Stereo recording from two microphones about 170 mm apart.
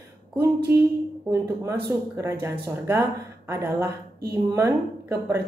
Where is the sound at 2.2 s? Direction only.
15° right (ahead or behind).